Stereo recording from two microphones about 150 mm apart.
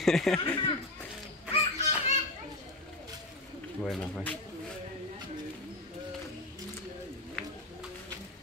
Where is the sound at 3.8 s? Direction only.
5° left (ahead or behind).